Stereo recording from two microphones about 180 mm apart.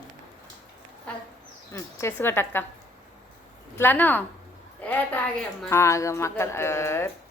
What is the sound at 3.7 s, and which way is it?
A woman's voice, 10° left (ahead or behind).